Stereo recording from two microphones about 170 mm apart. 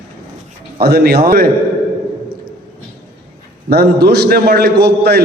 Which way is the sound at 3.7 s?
70° right (ahead or behind).